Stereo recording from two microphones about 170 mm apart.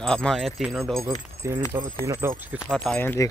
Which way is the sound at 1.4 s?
15° right (ahead or behind).